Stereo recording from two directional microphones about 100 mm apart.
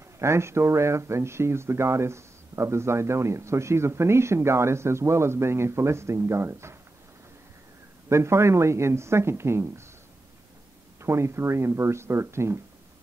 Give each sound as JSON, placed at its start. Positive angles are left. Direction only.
{"t": 0.2, "sound": "speech", "side_deg": -25}
{"t": 8.1, "sound": "speech", "side_deg": -25}
{"t": 11.0, "sound": "speech", "side_deg": -25}